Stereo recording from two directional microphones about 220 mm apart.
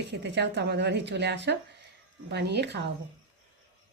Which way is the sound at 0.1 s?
50° right (ahead or behind).